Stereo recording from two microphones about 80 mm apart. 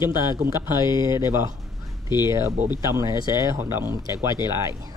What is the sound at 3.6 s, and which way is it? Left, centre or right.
Speech, right.